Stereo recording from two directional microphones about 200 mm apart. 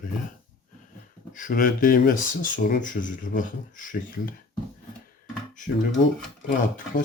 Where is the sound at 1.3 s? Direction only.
40° left (ahead or behind).